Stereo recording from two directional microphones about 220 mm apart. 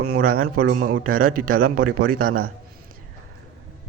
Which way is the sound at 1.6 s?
75° right (ahead or behind).